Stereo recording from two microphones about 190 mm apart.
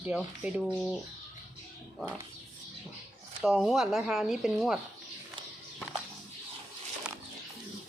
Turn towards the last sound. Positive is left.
turn(degrees=-5)  # may be behind; listen again after turning